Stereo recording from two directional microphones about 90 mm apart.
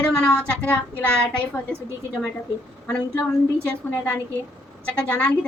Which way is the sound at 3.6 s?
20° left (ahead or behind).